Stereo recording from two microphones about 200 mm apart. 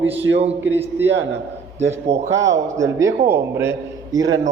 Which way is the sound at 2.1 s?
60° right (ahead or behind).